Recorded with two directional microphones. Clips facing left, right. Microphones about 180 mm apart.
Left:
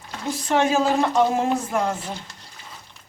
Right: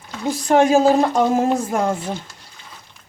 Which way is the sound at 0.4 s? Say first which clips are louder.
Right 6 dB; 45° right (ahead or behind).